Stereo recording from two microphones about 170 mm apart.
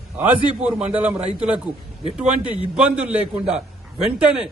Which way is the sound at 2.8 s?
5° right (ahead or behind).